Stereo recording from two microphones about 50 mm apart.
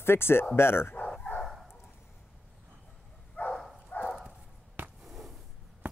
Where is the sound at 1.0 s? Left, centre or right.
Left.